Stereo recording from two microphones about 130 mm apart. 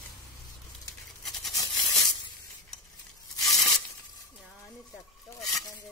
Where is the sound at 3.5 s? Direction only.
25° left (ahead or behind).